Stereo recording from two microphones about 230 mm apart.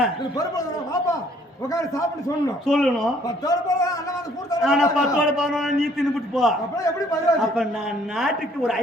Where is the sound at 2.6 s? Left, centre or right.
Centre.